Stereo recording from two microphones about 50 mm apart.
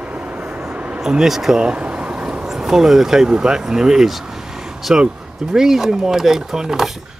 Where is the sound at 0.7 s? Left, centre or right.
Right.